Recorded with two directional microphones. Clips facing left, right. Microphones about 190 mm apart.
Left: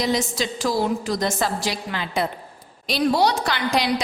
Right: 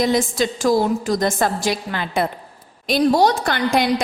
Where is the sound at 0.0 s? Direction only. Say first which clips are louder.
Right 5 dB; 50° right (ahead or behind).